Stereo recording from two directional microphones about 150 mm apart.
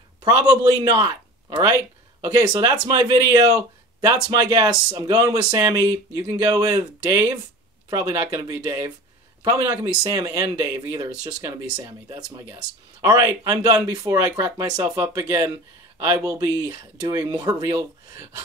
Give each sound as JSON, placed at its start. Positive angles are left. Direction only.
{"t": 0.2, "sound": "speech", "side_deg": -25}